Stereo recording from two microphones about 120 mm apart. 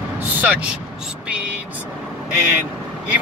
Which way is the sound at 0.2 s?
15° right (ahead or behind).